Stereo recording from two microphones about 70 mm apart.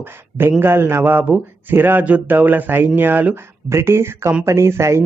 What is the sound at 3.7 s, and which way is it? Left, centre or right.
Speech, right.